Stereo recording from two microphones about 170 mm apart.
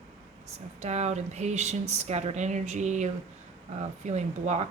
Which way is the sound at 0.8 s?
40° right (ahead or behind).